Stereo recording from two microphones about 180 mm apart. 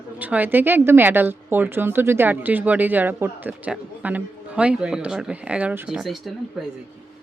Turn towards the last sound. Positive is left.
turn(degrees=0)  # may be behind; listen again after turning